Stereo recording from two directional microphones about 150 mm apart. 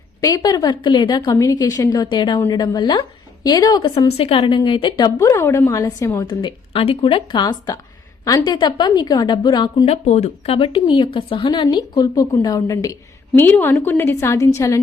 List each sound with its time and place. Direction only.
0.2 s speech: 25° left (ahead or behind)
4.2 s speech: 40° left (ahead or behind); by 6.2 s 20° left (ahead or behind)
6.2 s speech: 35° left (ahead or behind)
9.8 s speech: 45° left (ahead or behind); by 14.8 s 20° left (ahead or behind)